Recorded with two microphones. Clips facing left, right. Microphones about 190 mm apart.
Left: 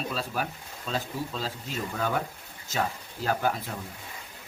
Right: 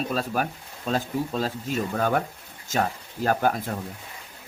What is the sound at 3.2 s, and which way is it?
Speech, 50° right (ahead or behind).